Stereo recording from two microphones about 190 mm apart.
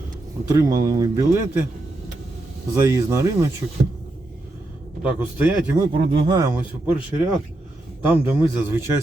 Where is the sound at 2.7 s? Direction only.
15° right (ahead or behind).